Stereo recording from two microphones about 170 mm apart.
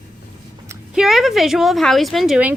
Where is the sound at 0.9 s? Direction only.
Centre (ahead or behind).